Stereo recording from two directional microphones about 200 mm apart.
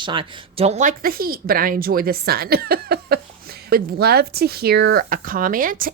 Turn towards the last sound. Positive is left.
turn(degrees=-45)  # may be behind; listen again after turning